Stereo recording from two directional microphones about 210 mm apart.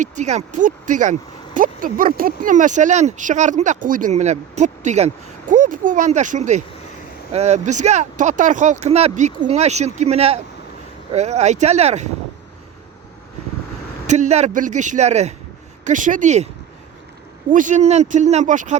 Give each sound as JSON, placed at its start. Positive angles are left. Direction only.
{"t": 0.0, "sound": "speech", "side_deg": -35}
{"t": 14.1, "sound": "speech", "side_deg": -35}
{"t": 17.5, "sound": "speech", "side_deg": -35}